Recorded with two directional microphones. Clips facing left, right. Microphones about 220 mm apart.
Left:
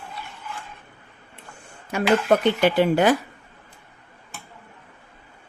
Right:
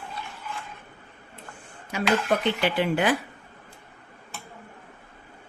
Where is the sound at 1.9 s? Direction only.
50° left (ahead or behind).